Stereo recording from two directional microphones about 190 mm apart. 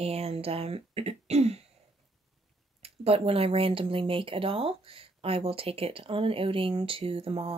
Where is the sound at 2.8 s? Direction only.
30° right (ahead or behind).